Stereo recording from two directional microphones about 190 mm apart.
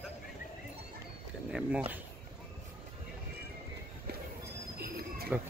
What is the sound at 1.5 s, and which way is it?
Speech, 5° right (ahead or behind).